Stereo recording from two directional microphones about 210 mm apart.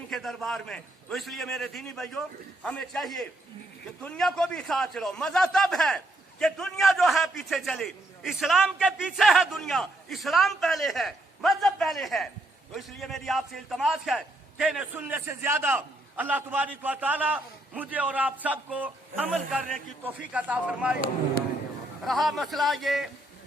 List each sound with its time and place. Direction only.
0.1 s a man's voice: centre (ahead or behind)
22.0 s a man's voice: centre (ahead or behind)